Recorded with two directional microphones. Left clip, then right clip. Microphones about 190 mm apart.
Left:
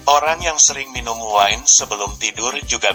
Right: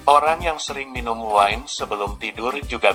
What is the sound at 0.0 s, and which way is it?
Speech, 30° left (ahead or behind).